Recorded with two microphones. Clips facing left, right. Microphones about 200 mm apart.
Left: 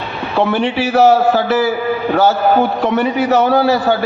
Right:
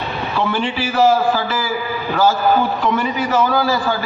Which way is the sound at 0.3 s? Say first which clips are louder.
Left 6 dB; 65° left (ahead or behind).